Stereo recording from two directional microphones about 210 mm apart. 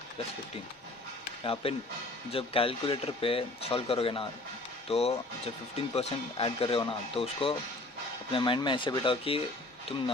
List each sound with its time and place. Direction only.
1.6 s speech: 30° left (ahead or behind)